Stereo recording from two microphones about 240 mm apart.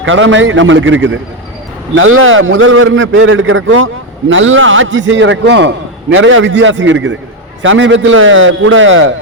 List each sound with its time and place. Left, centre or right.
0.0 s a man's voice: right